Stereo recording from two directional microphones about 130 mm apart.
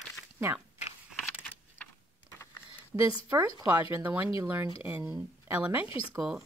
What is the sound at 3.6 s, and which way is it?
Speech, 20° right (ahead or behind).